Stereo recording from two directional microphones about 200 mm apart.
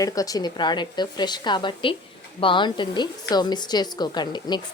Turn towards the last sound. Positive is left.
turn(degrees=20)  # may be behind; listen again after turning